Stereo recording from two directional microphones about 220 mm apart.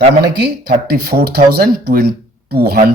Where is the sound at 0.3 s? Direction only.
45° right (ahead or behind).